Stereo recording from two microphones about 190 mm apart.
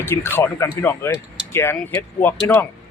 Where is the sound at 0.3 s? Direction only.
10° left (ahead or behind).